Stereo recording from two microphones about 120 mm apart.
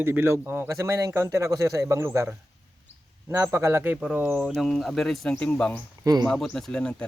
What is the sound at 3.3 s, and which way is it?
Speech, 25° right (ahead or behind).